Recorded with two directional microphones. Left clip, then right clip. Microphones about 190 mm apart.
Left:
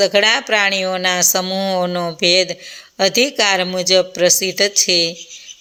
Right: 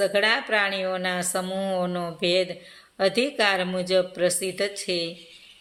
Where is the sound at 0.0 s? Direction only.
35° left (ahead or behind).